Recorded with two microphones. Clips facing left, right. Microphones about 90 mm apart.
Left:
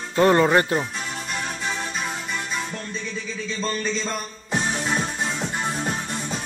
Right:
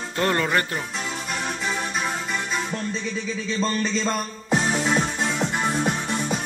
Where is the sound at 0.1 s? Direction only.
20° left (ahead or behind).